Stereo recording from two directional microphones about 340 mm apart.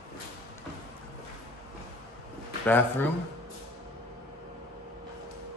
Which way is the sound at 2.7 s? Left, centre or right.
Centre.